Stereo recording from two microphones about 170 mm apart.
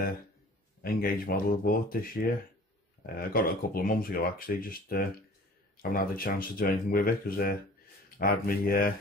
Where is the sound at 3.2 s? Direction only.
60° left (ahead or behind).